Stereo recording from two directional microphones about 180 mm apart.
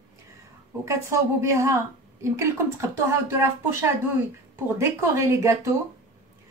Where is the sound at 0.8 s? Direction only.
15° right (ahead or behind).